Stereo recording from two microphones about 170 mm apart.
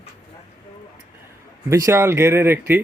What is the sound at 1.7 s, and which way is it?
Speech, 15° right (ahead or behind).